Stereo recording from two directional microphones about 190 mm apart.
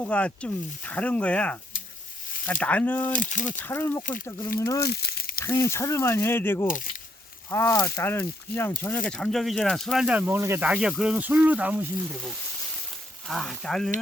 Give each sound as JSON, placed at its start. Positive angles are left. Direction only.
{"t": 0.0, "sound": "speech", "side_deg": 5}
{"t": 3.1, "sound": "speech", "side_deg": 45}
{"t": 3.6, "sound": "speech", "side_deg": 10}
{"t": 4.9, "sound": "speech", "side_deg": 60}
{"t": 5.5, "sound": "speech", "side_deg": 15}